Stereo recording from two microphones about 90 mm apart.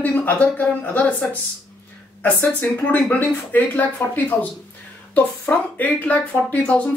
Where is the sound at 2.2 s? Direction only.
25° left (ahead or behind).